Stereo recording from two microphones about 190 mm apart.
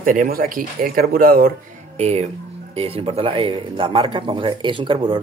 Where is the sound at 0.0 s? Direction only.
45° right (ahead or behind).